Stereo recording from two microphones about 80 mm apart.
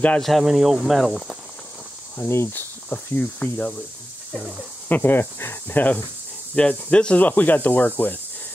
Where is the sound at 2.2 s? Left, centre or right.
Left.